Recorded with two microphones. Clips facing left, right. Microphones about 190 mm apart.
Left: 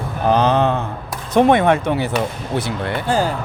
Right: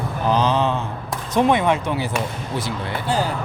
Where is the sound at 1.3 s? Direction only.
55° left (ahead or behind).